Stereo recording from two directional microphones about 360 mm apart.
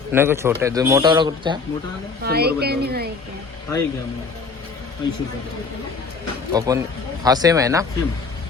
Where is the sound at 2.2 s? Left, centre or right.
Right.